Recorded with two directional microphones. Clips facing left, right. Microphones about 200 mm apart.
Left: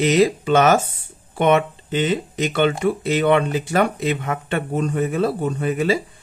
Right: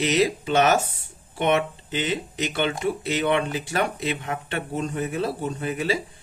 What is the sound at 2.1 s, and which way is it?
Speech, 55° left (ahead or behind).